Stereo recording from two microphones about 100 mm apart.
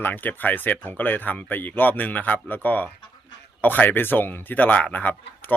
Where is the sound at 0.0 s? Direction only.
20° left (ahead or behind).